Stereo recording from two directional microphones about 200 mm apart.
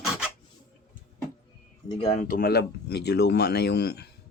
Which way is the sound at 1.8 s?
25° left (ahead or behind).